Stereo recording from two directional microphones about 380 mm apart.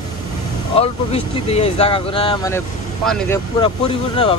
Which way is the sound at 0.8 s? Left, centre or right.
Centre.